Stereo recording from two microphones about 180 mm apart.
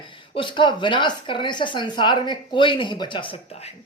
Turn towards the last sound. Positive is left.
turn(degrees=25)  # may be behind; listen again after turning